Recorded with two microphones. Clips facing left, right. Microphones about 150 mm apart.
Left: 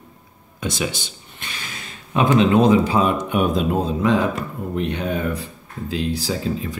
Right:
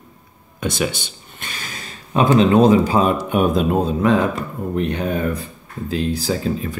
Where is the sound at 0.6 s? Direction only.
60° right (ahead or behind).